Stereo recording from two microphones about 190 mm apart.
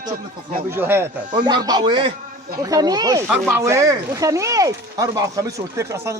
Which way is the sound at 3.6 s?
15° right (ahead or behind).